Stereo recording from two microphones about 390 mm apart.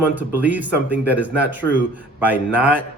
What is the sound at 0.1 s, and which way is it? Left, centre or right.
Speech, centre.